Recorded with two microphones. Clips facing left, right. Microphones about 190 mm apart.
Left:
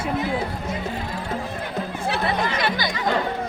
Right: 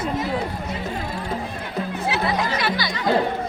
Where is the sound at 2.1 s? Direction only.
55° left (ahead or behind).